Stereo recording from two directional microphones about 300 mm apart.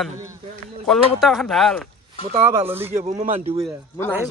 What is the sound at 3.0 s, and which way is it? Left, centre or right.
Speech, right.